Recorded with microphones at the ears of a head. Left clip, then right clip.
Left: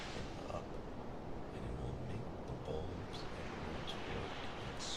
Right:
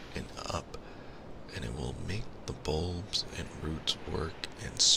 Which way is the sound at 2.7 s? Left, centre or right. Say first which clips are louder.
Right 12 dB; right.